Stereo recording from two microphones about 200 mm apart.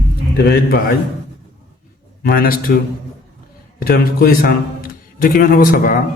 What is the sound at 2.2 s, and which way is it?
Speech, 45° left (ahead or behind).